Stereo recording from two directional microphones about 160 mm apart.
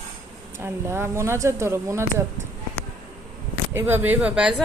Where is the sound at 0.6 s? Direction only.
15° right (ahead or behind).